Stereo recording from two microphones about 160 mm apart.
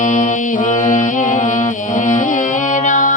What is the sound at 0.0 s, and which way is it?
Music, 50° left (ahead or behind).